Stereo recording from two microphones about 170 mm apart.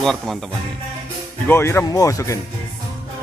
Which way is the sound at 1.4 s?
15° left (ahead or behind).